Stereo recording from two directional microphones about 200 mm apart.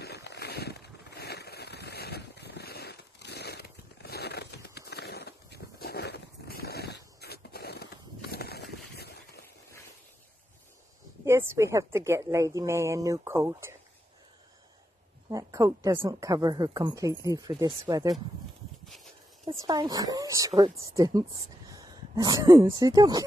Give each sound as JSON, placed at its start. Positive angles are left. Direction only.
{"t": 0.0, "sound": "a sound", "side_deg": 55}
{"t": 11.2, "sound": "speech", "side_deg": -15}
{"t": 15.2, "sound": "speech", "side_deg": -15}
{"t": 19.6, "sound": "speech", "side_deg": -20}